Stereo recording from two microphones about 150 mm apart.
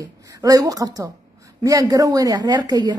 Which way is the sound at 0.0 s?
25° right (ahead or behind).